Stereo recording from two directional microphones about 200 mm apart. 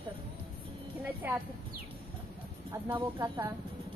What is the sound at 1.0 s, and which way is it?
Speech, 10° right (ahead or behind).